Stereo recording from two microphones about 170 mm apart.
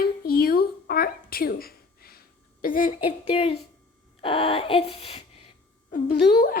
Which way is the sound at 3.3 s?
35° left (ahead or behind).